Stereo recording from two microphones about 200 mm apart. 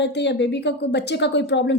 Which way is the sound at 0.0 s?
60° left (ahead or behind).